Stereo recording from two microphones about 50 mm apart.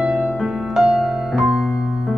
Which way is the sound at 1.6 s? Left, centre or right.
Centre.